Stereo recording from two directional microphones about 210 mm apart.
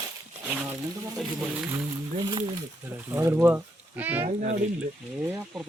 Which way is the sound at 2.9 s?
10° right (ahead or behind).